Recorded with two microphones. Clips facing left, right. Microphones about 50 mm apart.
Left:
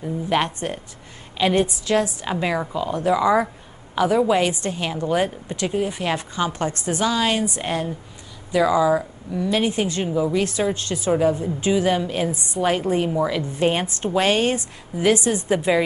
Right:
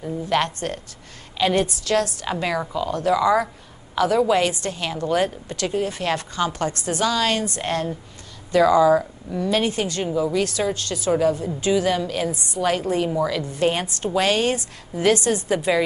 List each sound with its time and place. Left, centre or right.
0.3 s a woman's voice: centre
9.7 s a woman's voice: left
10.0 s speech: centre
10.3 s a woman's voice: left
15.0 s a woman's voice: centre